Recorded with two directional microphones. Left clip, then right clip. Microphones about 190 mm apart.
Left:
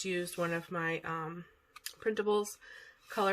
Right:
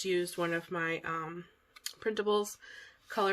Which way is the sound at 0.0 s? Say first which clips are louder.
Right 3 dB; 25° right (ahead or behind).